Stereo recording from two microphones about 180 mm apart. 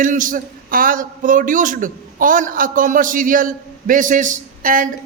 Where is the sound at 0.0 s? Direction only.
50° right (ahead or behind).